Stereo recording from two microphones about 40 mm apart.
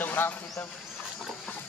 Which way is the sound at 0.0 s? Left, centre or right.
Left.